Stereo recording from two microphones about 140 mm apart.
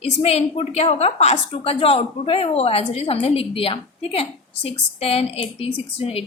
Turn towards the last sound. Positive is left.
turn(degrees=45)  # may be behind; listen again after turning